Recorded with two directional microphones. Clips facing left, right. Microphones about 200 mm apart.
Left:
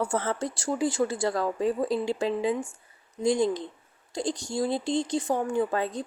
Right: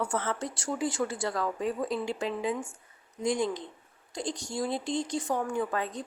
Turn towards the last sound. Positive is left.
turn(degrees=30)  # may be behind; listen again after turning